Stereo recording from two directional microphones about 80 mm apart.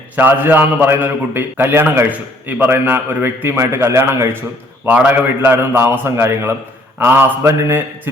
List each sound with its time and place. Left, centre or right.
0.2 s a man's voice: right
4.9 s a man's voice: centre